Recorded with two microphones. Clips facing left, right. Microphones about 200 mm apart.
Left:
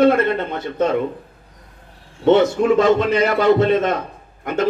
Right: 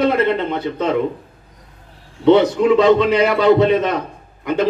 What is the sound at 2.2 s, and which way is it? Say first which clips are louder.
A man's voice: right 2 dB; 50° left (ahead or behind).